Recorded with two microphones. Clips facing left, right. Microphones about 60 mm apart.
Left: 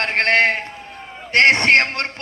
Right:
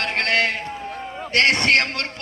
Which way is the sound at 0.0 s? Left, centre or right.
Left.